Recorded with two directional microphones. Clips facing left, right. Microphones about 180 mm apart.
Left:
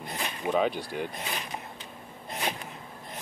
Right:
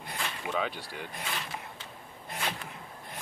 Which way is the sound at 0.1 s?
15° left (ahead or behind).